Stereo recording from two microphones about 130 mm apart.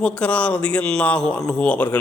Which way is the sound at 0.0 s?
10° left (ahead or behind).